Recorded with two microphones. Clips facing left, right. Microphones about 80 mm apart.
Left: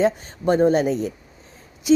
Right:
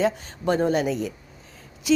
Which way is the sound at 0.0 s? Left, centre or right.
Left.